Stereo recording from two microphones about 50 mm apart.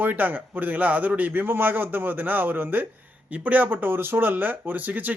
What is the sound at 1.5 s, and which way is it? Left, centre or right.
A man's voice, right.